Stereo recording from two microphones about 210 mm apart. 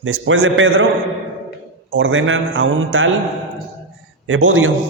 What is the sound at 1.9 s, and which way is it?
A man's voice, 65° right (ahead or behind).